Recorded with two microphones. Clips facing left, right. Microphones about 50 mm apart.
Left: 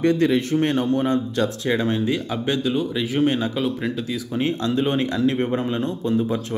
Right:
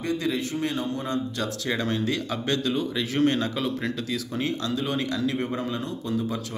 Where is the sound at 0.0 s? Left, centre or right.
Left.